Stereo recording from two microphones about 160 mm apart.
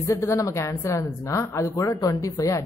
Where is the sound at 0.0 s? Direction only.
20° left (ahead or behind).